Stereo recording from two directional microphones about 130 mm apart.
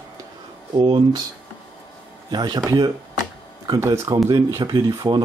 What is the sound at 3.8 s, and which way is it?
Speech, 20° right (ahead or behind).